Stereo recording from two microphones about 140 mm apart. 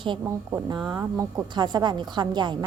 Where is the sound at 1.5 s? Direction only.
30° right (ahead or behind).